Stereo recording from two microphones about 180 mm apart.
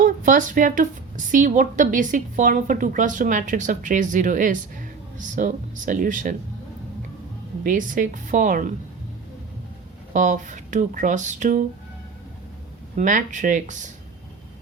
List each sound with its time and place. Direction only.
0.0 s a woman's voice: 45° right (ahead or behind)
7.6 s a woman's voice: 45° right (ahead or behind)
10.1 s a woman's voice: 45° right (ahead or behind)
13.0 s a woman's voice: 45° right (ahead or behind)